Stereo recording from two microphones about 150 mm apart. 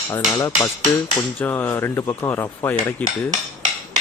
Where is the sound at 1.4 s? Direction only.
15° left (ahead or behind).